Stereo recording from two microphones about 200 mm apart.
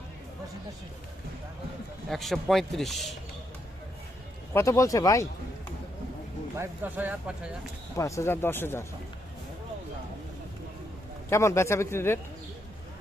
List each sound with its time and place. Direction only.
2.0 s a man's voice: centre (ahead or behind)
4.5 s speech: 15° left (ahead or behind)
6.6 s speech: 10° right (ahead or behind)
7.9 s speech: 15° left (ahead or behind)
11.3 s speech: 15° left (ahead or behind)